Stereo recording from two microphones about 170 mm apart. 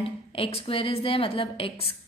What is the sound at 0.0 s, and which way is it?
A woman's voice, 35° left (ahead or behind).